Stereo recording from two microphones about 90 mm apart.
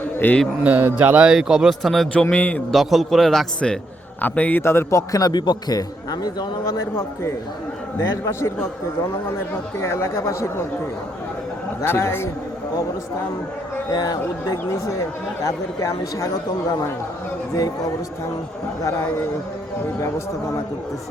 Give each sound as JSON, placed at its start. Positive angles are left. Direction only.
{"t": 0.2, "sound": "a man's voice", "side_deg": 25}
{"t": 0.6, "sound": "speech", "side_deg": -20}
{"t": 1.3, "sound": "a man's voice", "side_deg": -5}
{"t": 2.3, "sound": "a man's voice", "side_deg": 15}
{"t": 2.7, "sound": "a man's voice", "side_deg": 0}
{"t": 4.2, "sound": "a man's voice", "side_deg": 20}
{"t": 4.6, "sound": "a man's voice", "side_deg": 30}
{"t": 9.7, "sound": "a man's voice", "side_deg": 30}
{"t": 11.8, "sound": "a man's voice", "side_deg": 30}
{"t": 13.9, "sound": "a man's voice", "side_deg": 45}